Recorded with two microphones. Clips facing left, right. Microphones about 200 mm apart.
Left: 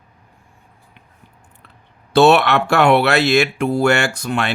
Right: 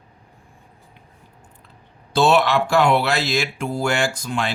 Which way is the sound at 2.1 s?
65° left (ahead or behind).